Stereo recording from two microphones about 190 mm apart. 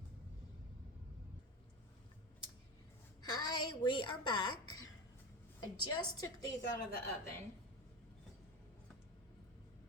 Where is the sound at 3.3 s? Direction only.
20° left (ahead or behind).